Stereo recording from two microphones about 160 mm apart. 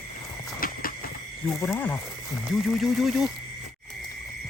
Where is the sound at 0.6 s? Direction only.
60° left (ahead or behind).